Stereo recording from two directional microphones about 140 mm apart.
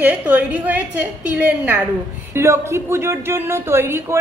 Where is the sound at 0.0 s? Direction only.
10° right (ahead or behind).